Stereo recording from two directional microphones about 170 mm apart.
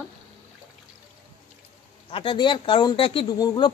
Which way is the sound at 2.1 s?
30° left (ahead or behind).